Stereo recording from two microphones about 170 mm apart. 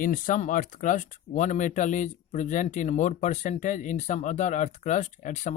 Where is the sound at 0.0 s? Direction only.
50° left (ahead or behind).